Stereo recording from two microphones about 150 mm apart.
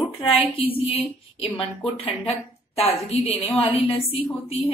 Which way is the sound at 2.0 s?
40° left (ahead or behind).